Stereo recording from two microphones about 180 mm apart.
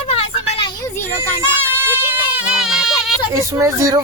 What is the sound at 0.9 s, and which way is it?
Child singing, 15° left (ahead or behind).